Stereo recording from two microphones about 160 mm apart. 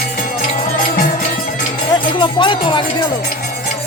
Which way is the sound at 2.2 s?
30° left (ahead or behind).